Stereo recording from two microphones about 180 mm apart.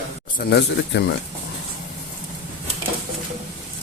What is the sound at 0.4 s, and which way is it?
Speech, 60° left (ahead or behind).